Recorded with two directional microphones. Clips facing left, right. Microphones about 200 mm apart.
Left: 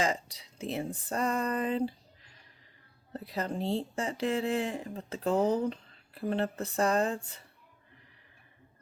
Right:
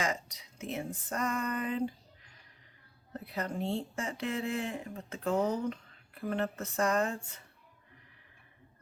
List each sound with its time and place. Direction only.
0.0 s speech: 30° left (ahead or behind)